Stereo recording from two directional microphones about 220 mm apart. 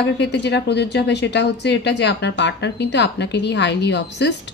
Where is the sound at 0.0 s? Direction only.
50° left (ahead or behind).